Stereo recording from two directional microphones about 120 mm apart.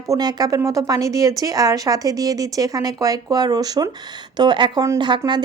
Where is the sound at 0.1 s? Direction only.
35° right (ahead or behind).